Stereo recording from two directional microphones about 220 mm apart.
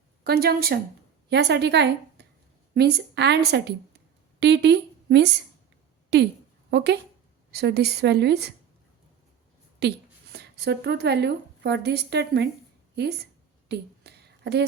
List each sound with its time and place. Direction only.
0.3 s a woman's voice: 45° right (ahead or behind)
9.8 s a woman's voice: 50° right (ahead or behind)
13.7 s a sound: 50° right (ahead or behind)